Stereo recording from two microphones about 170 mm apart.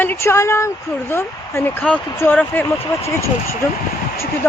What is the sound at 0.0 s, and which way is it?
Speech, 15° left (ahead or behind).